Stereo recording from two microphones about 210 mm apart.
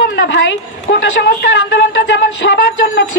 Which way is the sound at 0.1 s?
55° left (ahead or behind).